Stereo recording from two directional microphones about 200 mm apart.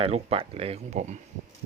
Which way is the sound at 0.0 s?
30° right (ahead or behind).